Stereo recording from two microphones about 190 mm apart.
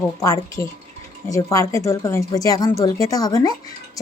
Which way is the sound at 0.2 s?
15° left (ahead or behind).